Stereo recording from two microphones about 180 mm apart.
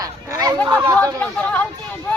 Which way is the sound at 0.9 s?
5° left (ahead or behind).